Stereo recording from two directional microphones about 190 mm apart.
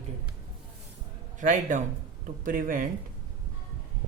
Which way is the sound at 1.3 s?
40° right (ahead or behind).